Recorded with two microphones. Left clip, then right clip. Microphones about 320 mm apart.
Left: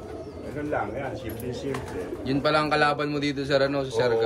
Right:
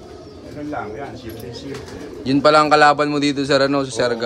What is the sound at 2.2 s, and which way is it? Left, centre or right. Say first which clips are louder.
A man's voice: right 11 dB; centre.